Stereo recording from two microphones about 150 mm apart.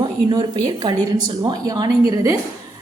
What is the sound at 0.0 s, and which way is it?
A woman's voice, 30° right (ahead or behind).